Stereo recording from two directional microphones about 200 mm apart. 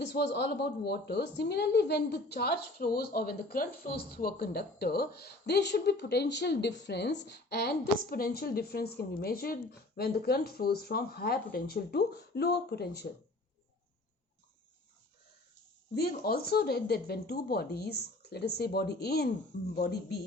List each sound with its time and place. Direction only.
0.0 s a woman's voice: 60° left (ahead or behind)
16.0 s a woman's voice: 50° left (ahead or behind)